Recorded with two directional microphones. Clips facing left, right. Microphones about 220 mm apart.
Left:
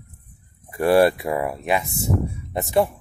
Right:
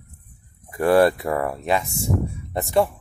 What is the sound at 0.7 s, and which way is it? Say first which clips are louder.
Speech: even; 25° left (ahead or behind).